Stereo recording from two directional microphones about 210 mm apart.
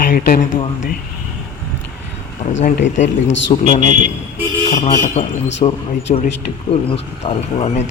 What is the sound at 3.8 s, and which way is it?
Speech, 35° right (ahead or behind).